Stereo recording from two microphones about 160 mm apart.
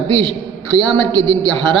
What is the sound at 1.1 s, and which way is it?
Speech, 30° right (ahead or behind).